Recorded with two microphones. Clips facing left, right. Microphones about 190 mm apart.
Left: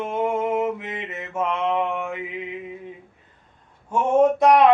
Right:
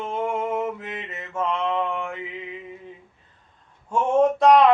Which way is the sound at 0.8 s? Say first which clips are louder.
Left 3 dB; 20° left (ahead or behind).